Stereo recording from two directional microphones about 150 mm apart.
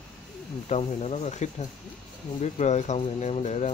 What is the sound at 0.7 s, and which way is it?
Speech, 45° left (ahead or behind).